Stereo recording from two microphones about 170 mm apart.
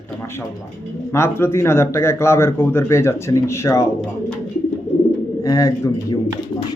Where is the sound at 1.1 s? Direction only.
15° left (ahead or behind).